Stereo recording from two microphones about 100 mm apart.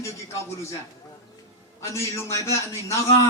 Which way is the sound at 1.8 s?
30° left (ahead or behind).